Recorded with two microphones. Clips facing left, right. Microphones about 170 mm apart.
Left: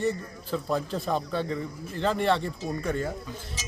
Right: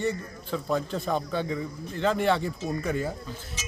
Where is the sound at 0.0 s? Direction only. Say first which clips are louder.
Left 1 dB; centre (ahead or behind).